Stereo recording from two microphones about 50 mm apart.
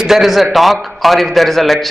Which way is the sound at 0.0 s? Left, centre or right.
Centre.